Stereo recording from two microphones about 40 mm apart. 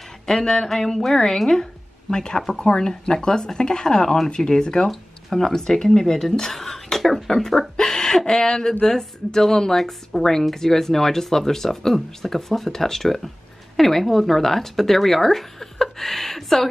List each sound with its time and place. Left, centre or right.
0.3 s a woman's voice: centre
4.8 s a woman's voice: centre
7.0 s speech: centre
7.7 s a woman's voice: centre